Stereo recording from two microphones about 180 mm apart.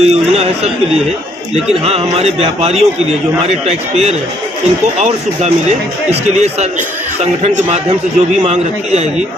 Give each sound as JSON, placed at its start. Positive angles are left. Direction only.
{"t": 0.0, "sound": "chatter", "side_deg": -35}
{"t": 1.8, "sound": "speech", "side_deg": -35}